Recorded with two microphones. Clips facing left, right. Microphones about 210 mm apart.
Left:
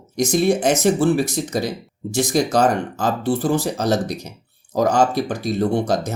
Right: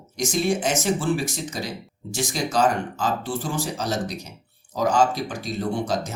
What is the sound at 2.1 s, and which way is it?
Speech, 40° left (ahead or behind).